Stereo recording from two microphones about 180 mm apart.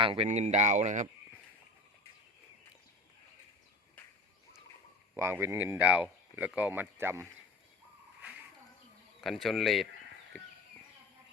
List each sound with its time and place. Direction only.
0.0 s speech: 30° right (ahead or behind)
0.3 s speech: 40° right (ahead or behind)
5.1 s speech: 10° right (ahead or behind)
9.2 s speech: centre (ahead or behind)